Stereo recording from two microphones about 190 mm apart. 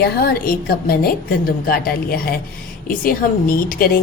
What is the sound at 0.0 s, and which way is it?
A woman's voice, 55° left (ahead or behind).